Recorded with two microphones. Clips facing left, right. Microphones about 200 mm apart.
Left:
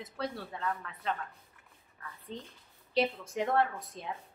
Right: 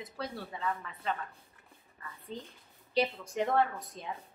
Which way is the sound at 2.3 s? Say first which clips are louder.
Right 1 dB; 5° right (ahead or behind).